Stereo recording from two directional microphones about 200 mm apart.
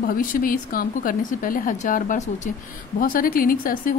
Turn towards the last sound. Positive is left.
turn(degrees=45)  # may be behind; listen again after turning